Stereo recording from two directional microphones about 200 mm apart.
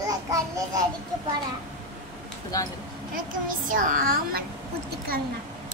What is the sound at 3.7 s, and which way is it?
Speech, 40° right (ahead or behind).